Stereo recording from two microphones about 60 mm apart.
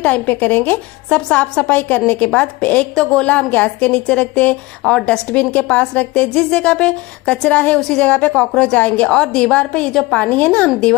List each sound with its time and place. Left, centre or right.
0.0 s a woman's voice: left
5.3 s a woman's voice: left